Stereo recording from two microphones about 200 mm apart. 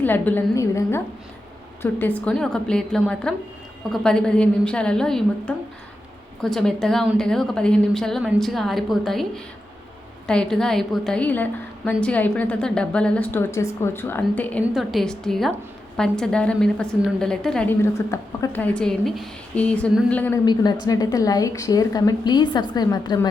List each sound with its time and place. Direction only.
0.0 s a woman's voice: 10° left (ahead or behind)
20.4 s a woman's voice: 20° left (ahead or behind)